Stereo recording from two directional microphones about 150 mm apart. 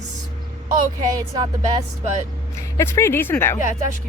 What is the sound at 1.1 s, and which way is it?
Speech, 25° right (ahead or behind).